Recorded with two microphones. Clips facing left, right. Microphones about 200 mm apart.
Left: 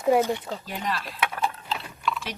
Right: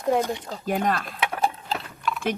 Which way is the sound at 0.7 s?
50° right (ahead or behind).